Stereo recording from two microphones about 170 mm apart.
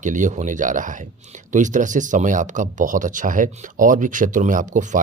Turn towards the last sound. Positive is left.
turn(degrees=-45)  # may be behind; listen again after turning